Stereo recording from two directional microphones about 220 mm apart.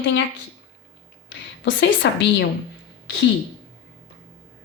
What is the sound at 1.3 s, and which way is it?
A woman's voice, 55° left (ahead or behind).